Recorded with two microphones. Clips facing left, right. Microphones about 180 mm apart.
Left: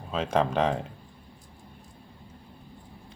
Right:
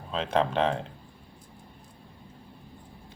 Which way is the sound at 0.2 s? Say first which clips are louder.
Left 1 dB; 30° right (ahead or behind).